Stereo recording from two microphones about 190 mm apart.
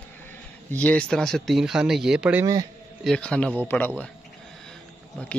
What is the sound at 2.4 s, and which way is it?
Speech, 20° right (ahead or behind).